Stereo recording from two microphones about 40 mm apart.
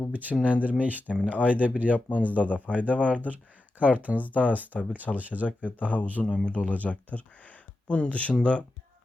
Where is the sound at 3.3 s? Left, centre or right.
Right.